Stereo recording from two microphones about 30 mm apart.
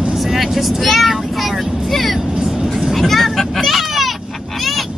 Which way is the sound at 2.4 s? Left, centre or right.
Centre.